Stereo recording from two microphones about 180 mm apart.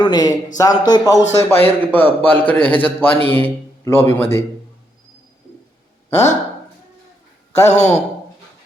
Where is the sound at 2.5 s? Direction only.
30° left (ahead or behind).